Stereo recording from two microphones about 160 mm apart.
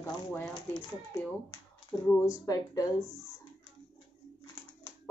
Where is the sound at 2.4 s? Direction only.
20° left (ahead or behind).